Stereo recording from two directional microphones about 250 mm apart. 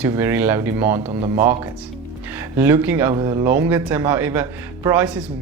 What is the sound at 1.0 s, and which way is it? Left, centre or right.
Speech, right.